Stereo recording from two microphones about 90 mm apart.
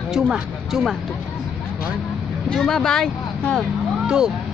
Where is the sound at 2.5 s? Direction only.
5° left (ahead or behind).